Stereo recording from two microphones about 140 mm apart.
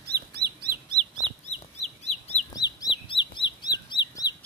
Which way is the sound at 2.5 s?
30° left (ahead or behind).